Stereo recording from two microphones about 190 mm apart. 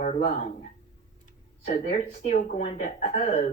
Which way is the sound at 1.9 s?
35° left (ahead or behind).